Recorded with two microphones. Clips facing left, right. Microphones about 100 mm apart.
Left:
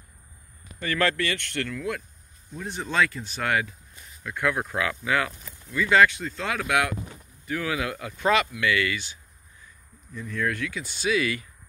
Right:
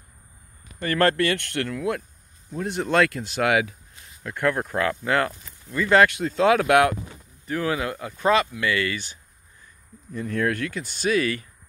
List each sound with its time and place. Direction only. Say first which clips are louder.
0.7 s speech: right 5 dB; 45° right (ahead or behind); by 3.7 s 75° right (ahead or behind)
4.8 s speech: right 4 dB; 45° right (ahead or behind)
5.9 s speech: right 3 dB; 70° right (ahead or behind); by 7.0 s 50° right (ahead or behind)
7.4 s speech: right 3 dB; 35° right (ahead or behind)
10.1 s speech: right 4 dB; 60° right (ahead or behind); by 11.4 s 40° right (ahead or behind)